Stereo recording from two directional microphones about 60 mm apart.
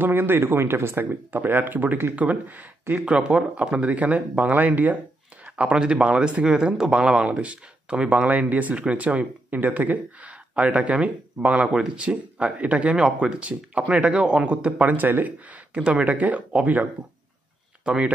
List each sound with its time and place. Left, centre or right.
0.0 s speech: right
1.4 s speech: right
3.1 s speech: centre
5.4 s speech: centre
12.9 s speech: centre
17.8 s speech: centre